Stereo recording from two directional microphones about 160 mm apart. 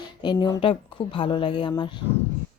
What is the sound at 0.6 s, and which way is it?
A woman's voice, 35° left (ahead or behind).